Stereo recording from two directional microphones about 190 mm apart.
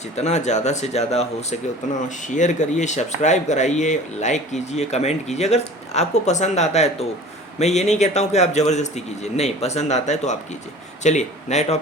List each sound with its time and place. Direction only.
0.2 s speech: 35° left (ahead or behind)